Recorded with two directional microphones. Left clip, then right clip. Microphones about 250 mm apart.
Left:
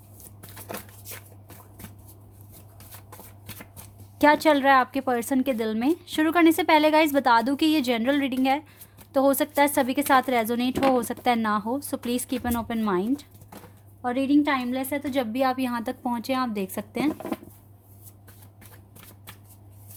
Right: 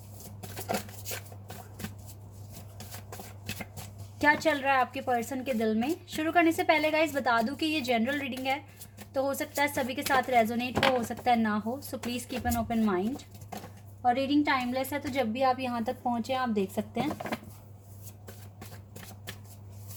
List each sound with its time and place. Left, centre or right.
4.2 s a woman's voice: left
14.1 s a woman's voice: left